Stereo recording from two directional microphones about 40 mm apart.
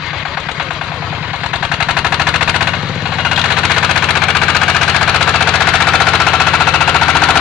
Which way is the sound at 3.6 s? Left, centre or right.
Centre.